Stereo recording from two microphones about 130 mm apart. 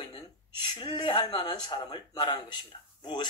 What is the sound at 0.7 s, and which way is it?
Speech, 35° left (ahead or behind).